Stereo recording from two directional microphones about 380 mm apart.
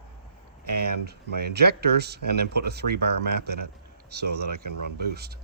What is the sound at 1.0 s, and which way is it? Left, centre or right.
Speech, right.